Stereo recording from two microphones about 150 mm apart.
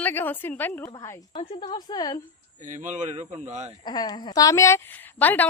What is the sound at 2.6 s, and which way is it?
Speech, 55° right (ahead or behind).